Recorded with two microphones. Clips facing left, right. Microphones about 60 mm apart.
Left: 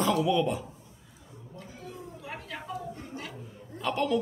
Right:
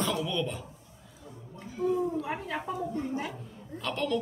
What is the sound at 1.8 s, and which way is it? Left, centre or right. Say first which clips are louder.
Speech: right 16 dB; right.